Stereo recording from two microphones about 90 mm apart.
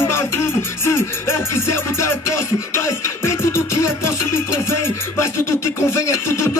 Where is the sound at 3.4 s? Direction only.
30° left (ahead or behind).